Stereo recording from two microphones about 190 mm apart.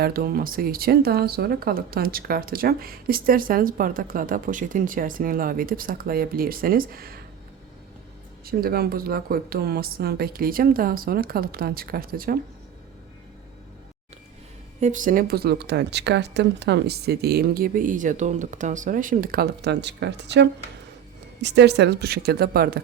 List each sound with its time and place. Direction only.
0.0 s speech: 50° right (ahead or behind)
8.4 s speech: 50° right (ahead or behind)
14.8 s speech: 40° right (ahead or behind)